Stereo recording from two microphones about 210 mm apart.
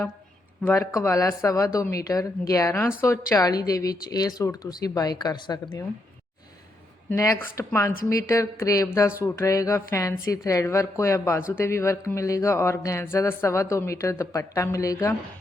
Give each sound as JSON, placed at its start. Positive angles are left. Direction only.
{"t": 0.6, "sound": "speech", "side_deg": 10}
{"t": 7.1, "sound": "speech", "side_deg": 10}